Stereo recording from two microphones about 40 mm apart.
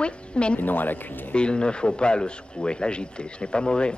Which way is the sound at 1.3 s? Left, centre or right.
Left.